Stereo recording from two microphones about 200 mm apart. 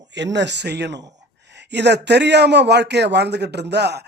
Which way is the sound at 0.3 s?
60° right (ahead or behind).